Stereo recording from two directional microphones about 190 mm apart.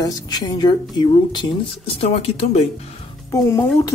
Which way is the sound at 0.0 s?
20° left (ahead or behind).